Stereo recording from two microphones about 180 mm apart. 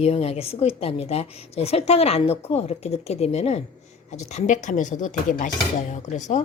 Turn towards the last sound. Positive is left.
turn(degrees=40)  # may be behind; listen again after turning